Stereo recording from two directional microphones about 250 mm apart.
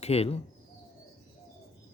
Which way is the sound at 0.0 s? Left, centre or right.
Left.